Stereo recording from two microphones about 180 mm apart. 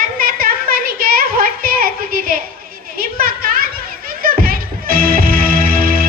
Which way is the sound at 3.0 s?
55° right (ahead or behind).